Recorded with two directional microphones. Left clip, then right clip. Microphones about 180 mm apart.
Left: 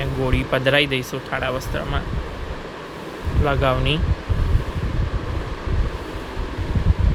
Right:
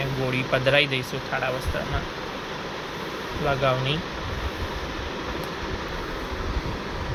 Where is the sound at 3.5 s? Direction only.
40° left (ahead or behind).